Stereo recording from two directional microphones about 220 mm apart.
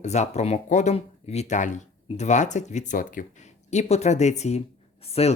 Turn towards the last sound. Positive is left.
turn(degrees=30)  # may be behind; listen again after turning